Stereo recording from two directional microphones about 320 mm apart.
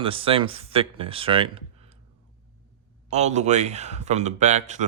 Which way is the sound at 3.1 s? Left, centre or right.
Right.